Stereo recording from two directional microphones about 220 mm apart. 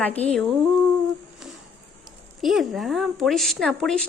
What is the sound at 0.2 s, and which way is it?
Speech, 30° left (ahead or behind).